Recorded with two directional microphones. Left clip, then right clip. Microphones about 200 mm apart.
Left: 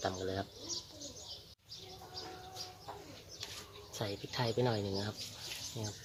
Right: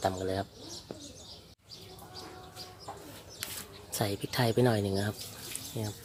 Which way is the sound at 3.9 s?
45° right (ahead or behind).